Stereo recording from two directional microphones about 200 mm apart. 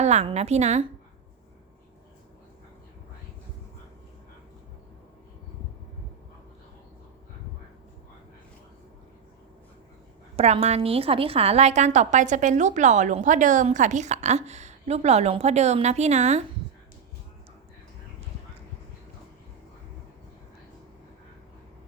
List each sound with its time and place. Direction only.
0.0 s a woman's voice: 35° right (ahead or behind)
10.3 s a woman's voice: 30° right (ahead or behind)